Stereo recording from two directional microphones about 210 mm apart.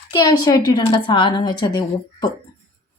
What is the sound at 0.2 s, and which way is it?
Speech, 20° left (ahead or behind).